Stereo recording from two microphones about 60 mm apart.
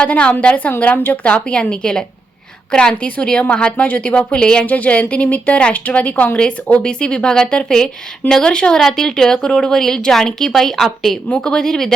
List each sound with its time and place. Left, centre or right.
0.0 s speech: left
1.2 s speech: centre
4.6 s speech: left; by 11.2 s centre
11.3 s speech: centre